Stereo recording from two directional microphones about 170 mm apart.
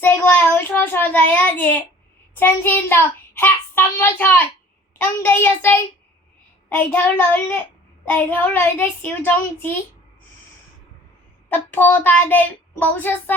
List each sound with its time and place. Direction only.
0.0 s child singing: 10° left (ahead or behind)
11.4 s child singing: 10° left (ahead or behind)